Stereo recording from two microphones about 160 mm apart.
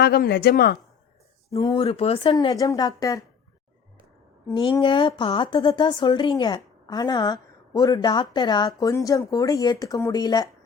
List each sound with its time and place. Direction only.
0.0 s speech: 80° left
1.5 s a woman's voice: 30° left (ahead or behind)
4.8 s a woman's voice: 30° left (ahead or behind)